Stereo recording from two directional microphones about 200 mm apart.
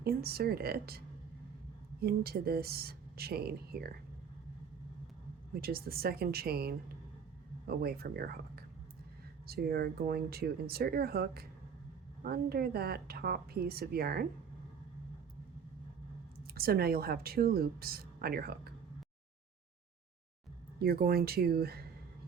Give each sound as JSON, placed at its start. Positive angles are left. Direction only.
{"t": 0.0, "sound": "speech", "side_deg": -50}
{"t": 5.5, "sound": "speech", "side_deg": -50}
{"t": 16.6, "sound": "speech", "side_deg": -50}
{"t": 20.8, "sound": "speech", "side_deg": -50}